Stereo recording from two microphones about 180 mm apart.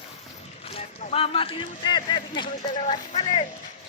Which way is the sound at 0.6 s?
35° left (ahead or behind).